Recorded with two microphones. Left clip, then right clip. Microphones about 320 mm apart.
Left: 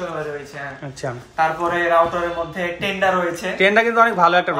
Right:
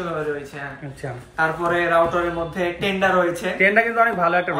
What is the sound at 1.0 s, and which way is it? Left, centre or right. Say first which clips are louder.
A man's voice: left 2 dB; centre.